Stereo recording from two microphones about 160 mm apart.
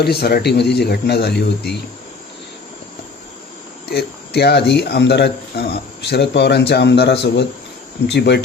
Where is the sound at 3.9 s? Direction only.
90° left.